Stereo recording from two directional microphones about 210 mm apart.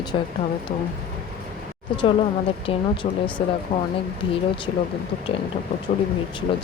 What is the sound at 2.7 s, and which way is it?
Speech, 25° left (ahead or behind).